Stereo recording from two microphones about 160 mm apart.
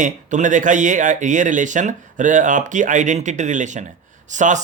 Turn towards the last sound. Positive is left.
turn(degrees=-50)  # may be behind; listen again after turning